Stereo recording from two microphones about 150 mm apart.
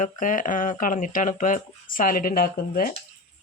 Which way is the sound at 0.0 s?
60° left (ahead or behind).